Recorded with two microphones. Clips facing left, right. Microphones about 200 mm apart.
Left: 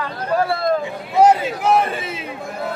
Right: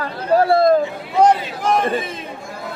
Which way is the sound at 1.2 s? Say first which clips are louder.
Left 1 dB; 10° left (ahead or behind).